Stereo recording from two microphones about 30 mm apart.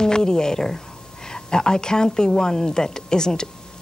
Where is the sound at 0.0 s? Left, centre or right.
Left.